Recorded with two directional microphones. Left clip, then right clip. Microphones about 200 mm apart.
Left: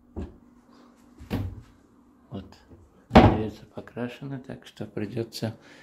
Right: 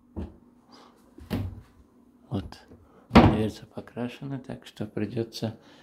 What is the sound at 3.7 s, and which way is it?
Speech, 5° right (ahead or behind).